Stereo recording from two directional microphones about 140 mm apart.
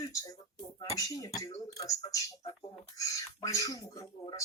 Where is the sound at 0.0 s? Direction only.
25° left (ahead or behind).